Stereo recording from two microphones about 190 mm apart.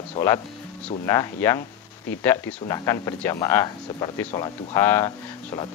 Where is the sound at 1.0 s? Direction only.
15° left (ahead or behind).